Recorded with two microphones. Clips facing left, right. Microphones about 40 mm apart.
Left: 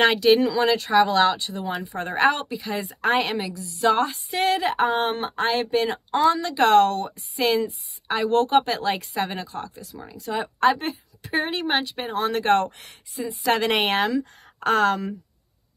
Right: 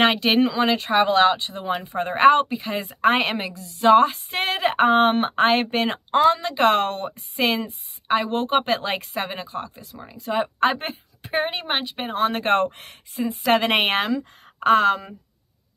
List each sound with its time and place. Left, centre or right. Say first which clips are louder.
0.0 s a woman's voice: left 1 dB; right
11.4 s a woman's voice: left 1 dB; centre
11.9 s speech: right 2 dB; right
13.5 s a woman's voice: right 2 dB; right